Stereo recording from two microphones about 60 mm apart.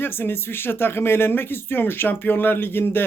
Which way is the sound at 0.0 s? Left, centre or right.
Left.